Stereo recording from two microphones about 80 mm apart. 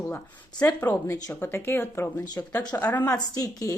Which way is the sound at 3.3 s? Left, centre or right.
Left.